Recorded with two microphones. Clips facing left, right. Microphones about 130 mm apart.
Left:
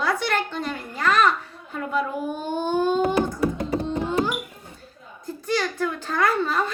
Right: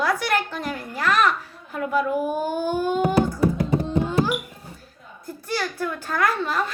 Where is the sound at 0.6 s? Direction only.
5° right (ahead or behind).